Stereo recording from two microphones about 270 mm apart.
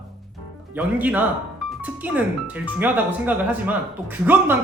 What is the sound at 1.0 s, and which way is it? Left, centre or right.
Speech, centre.